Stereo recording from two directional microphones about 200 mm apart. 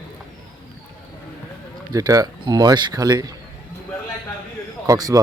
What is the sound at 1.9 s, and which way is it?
Speech, 15° right (ahead or behind).